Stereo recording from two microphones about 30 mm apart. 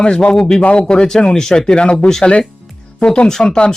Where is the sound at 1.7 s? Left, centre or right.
Left.